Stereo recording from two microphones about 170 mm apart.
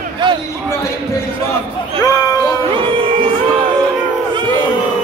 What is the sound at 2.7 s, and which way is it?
Music, 30° right (ahead or behind).